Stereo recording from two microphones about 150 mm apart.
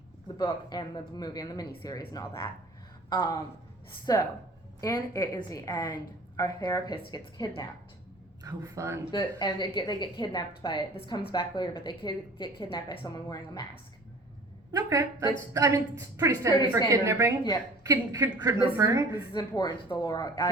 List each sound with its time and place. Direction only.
0.3 s a woman's voice: 30° left (ahead or behind)
8.4 s a woman's voice: 20° right (ahead or behind)
9.1 s a woman's voice: 30° left (ahead or behind)
14.7 s a woman's voice: 25° right (ahead or behind)
19.3 s a woman's voice: 30° left (ahead or behind)